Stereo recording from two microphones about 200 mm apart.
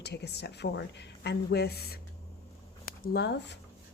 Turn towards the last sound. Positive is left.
turn(degrees=60)  # may be behind; listen again after turning